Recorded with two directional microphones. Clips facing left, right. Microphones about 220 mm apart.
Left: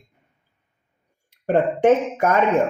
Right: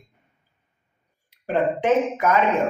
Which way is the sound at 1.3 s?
50° left (ahead or behind).